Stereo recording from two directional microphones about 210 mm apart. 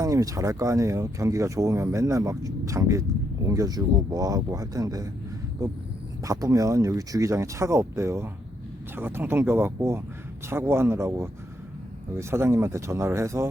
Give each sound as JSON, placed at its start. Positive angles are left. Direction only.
{"t": 0.0, "sound": "speech", "side_deg": -15}